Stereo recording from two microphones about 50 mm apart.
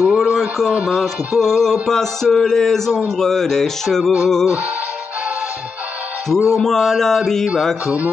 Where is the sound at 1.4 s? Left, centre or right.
Centre.